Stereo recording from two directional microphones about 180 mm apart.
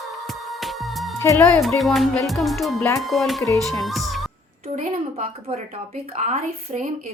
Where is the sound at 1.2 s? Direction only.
15° left (ahead or behind).